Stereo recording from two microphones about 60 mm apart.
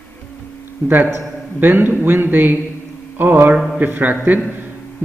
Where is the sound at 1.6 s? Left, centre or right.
Right.